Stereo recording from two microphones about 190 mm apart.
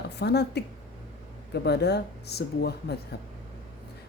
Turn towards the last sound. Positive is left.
turn(degrees=60)  # may be behind; listen again after turning